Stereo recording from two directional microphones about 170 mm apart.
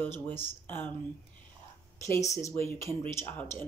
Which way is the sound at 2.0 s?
20° left (ahead or behind).